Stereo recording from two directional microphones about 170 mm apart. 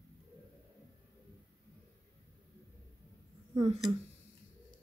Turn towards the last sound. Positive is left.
turn(degrees=-40)  # may be behind; listen again after turning